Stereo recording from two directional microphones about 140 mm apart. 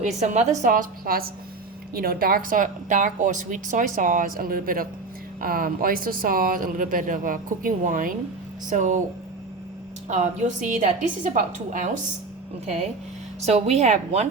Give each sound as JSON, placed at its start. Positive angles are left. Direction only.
{"t": 0.0, "sound": "a woman's voice", "side_deg": -55}
{"t": 0.6, "sound": "a woman's voice", "side_deg": -75}
{"t": 8.7, "sound": "a woman's voice", "side_deg": -65}
{"t": 10.1, "sound": "a woman's voice", "side_deg": -60}
{"t": 13.4, "sound": "a woman's voice", "side_deg": -50}